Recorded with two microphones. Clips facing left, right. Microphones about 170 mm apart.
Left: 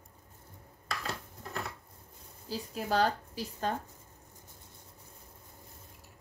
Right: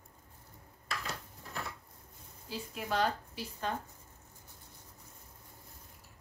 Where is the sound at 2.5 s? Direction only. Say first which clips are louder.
Left 4 dB; 35° left (ahead or behind).